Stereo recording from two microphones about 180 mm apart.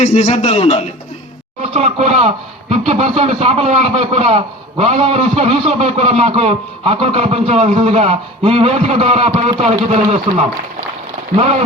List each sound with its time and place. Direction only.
0.0 s a man's voice: 40° left (ahead or behind)
1.7 s a man's voice: 35° right (ahead or behind)